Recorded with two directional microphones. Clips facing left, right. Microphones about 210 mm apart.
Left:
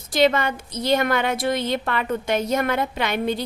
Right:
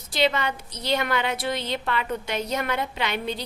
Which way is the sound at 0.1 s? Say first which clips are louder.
Left 5 dB; 50° left (ahead or behind).